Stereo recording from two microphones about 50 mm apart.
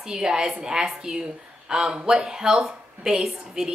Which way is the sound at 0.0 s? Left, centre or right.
Centre.